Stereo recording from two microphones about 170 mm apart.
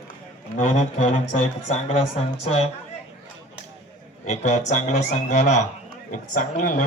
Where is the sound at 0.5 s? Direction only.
45° left (ahead or behind).